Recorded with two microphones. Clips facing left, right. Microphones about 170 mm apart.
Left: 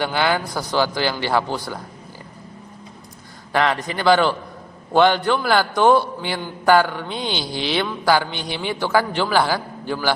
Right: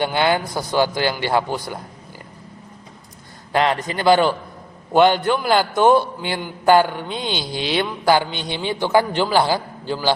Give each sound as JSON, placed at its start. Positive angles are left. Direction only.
{"t": 0.0, "sound": "a man's voice", "side_deg": -20}
{"t": 3.5, "sound": "a man's voice", "side_deg": -20}